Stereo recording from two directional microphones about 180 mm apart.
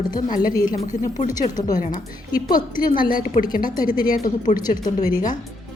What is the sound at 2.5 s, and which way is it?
A woman's voice, 50° left (ahead or behind).